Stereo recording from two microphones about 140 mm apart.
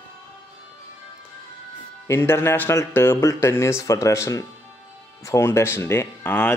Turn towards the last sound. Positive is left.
turn(degrees=15)  # may be behind; listen again after turning